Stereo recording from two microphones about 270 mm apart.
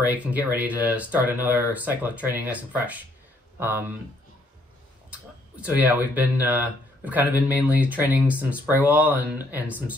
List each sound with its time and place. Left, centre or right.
0.0 s speech: centre
5.1 s speech: centre